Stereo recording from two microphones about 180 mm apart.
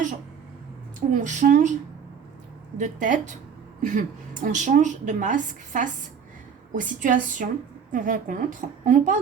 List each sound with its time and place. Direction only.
1.1 s a woman's voice: 45° right (ahead or behind)
2.7 s a woman's voice: 45° right (ahead or behind)